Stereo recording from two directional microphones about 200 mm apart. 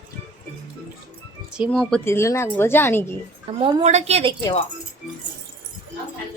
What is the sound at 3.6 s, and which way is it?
Speech, 25° right (ahead or behind).